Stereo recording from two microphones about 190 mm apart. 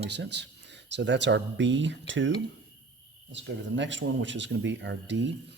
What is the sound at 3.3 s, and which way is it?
Speech, 70° right (ahead or behind).